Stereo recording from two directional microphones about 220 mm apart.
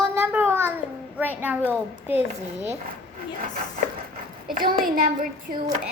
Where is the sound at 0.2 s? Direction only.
10° right (ahead or behind).